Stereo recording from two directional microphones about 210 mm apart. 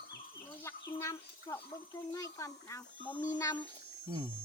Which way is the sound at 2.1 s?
15° left (ahead or behind).